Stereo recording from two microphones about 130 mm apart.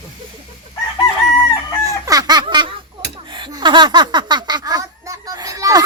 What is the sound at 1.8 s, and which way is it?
Fowl, 25° right (ahead or behind).